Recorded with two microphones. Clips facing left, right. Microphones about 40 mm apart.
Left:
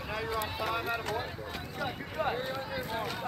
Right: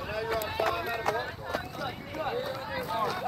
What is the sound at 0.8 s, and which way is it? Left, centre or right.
Music, centre.